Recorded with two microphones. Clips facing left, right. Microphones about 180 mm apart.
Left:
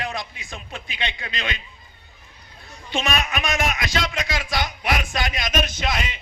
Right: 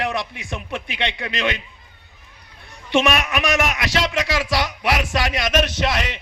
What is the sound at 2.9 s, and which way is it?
A man's voice, 75° right (ahead or behind).